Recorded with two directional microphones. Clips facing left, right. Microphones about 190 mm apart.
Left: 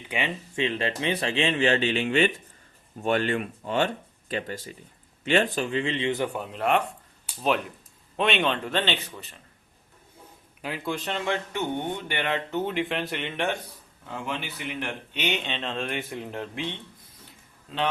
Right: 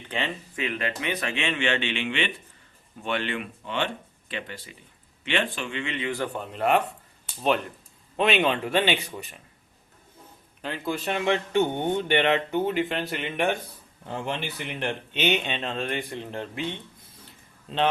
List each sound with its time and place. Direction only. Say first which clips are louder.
0.1 s speech: even; 15° left (ahead or behind)
0.5 s speech: left 5 dB; 30° left (ahead or behind)
6.3 s speech: right 1 dB; centre (ahead or behind); by 9.3 s 15° right (ahead or behind)
10.6 s speech: right 1 dB; 5° left (ahead or behind)
11.5 s speech: right 6 dB; 30° right (ahead or behind); by 13.5 s 10° right (ahead or behind)
14.8 s speech: right 5 dB; 25° right (ahead or behind)
15.4 s speech: right 1 dB; 5° right (ahead or behind)